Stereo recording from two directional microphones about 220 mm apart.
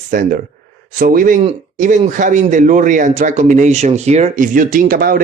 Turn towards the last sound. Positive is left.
turn(degrees=-40)  # may be behind; listen again after turning